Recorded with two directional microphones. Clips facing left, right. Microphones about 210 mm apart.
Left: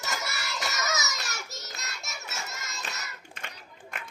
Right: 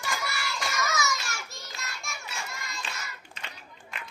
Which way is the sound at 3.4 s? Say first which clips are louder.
Left 1 dB; 50° left (ahead or behind).